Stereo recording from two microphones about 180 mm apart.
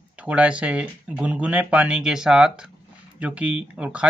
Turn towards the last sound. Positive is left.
turn(degrees=-5)  # may be behind; listen again after turning